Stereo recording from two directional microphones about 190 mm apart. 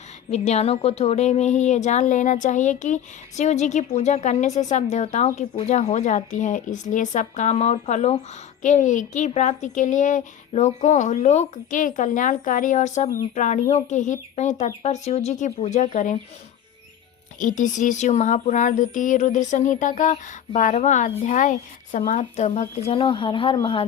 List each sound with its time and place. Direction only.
0.3 s speech: 35° left (ahead or behind)
17.4 s speech: 40° left (ahead or behind)